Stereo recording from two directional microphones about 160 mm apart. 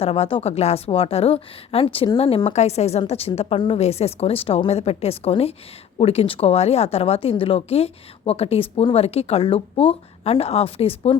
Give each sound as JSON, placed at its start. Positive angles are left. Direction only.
{"t": 0.0, "sound": "speech", "side_deg": 35}